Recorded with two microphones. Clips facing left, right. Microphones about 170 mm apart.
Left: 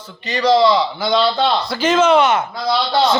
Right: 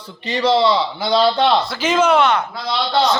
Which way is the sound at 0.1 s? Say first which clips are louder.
Left 2 dB; 25° right (ahead or behind).